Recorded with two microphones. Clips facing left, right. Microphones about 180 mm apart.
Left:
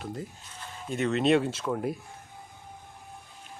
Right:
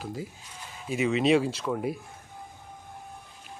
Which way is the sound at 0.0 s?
Centre (ahead or behind).